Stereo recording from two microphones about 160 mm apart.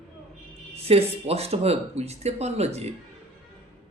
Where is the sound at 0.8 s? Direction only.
40° right (ahead or behind).